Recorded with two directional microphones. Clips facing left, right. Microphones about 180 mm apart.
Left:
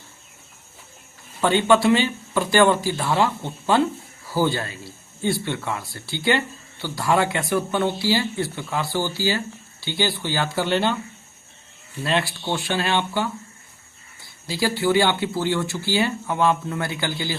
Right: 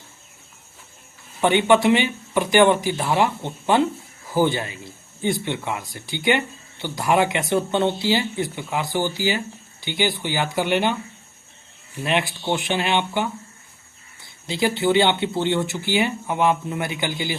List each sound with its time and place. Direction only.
1.4 s speech: 20° right (ahead or behind)
12.0 s speech: 20° right (ahead or behind)